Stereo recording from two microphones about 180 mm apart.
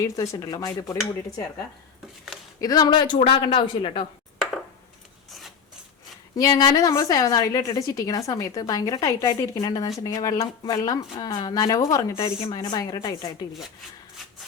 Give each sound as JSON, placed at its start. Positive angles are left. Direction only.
{"t": 0.0, "sound": "speech", "side_deg": 20}
{"t": 2.6, "sound": "speech", "side_deg": 20}
{"t": 6.3, "sound": "speech", "side_deg": 20}